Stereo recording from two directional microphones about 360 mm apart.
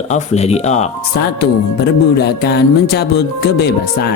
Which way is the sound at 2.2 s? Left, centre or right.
Left.